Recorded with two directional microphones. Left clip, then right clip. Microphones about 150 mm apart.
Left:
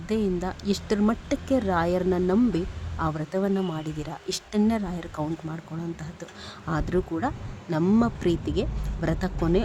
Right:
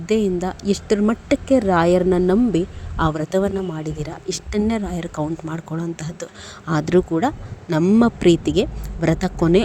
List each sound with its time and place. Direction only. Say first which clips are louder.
0.0 s speech: right 8 dB; 25° right (ahead or behind)
3.7 s speech: right 5 dB; 20° right (ahead or behind)
5.5 s speech: right 8 dB; 40° right (ahead or behind)